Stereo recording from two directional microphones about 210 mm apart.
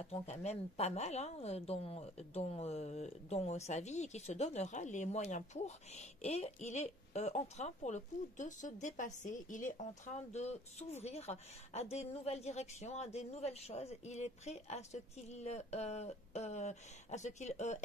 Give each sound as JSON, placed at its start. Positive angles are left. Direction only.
{"t": 0.1, "sound": "a woman's voice", "side_deg": 30}